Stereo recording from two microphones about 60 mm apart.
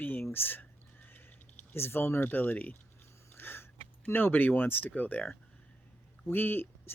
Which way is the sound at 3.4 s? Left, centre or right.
Left.